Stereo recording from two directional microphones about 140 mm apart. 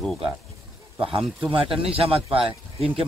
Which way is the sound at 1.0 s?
40° right (ahead or behind).